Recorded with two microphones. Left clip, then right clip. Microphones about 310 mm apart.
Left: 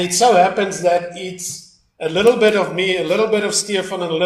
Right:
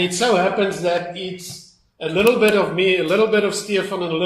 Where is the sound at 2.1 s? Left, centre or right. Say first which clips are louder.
Left 2 dB; left.